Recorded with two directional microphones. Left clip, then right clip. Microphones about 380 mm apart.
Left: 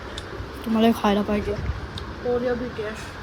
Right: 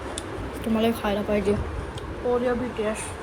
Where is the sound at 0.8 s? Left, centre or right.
Centre.